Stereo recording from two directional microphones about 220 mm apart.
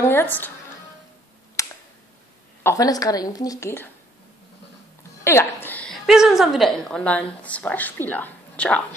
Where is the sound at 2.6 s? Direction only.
15° left (ahead or behind).